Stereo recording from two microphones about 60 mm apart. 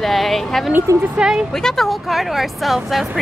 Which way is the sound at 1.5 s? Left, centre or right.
Centre.